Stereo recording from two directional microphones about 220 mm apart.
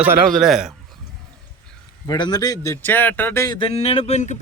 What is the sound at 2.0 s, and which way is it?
Speech, 20° left (ahead or behind).